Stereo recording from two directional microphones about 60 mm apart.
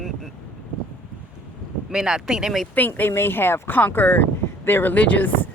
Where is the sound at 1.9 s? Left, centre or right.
Centre.